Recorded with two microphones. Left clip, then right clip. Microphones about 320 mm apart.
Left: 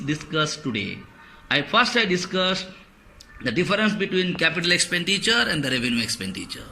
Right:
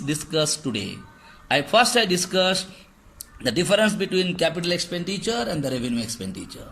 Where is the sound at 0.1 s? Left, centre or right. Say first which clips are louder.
Right 1 dB; right.